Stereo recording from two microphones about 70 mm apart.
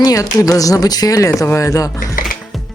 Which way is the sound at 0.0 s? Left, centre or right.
Left.